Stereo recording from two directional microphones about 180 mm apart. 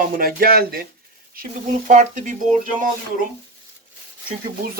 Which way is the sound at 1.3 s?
45° right (ahead or behind).